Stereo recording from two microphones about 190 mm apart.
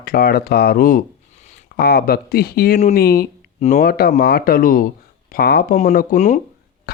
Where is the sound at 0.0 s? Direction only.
55° left (ahead or behind).